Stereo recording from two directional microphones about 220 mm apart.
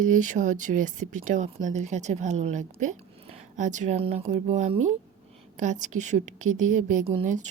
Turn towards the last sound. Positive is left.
turn(degrees=-35)  # may be behind; listen again after turning